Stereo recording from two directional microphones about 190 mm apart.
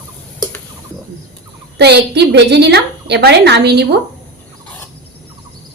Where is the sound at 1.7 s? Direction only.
60° right (ahead or behind).